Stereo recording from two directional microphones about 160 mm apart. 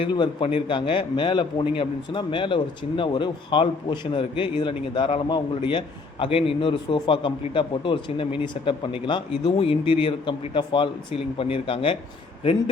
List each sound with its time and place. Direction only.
0.0 s a man's voice: 30° left (ahead or behind)